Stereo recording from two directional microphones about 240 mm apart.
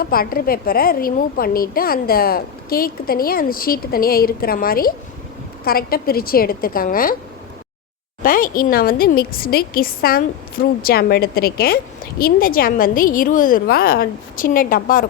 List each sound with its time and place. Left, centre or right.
0.0 s a child's voice: left
8.2 s a child's voice: left